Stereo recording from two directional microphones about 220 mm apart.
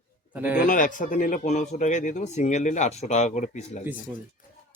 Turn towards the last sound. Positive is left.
turn(degrees=30)  # may be behind; listen again after turning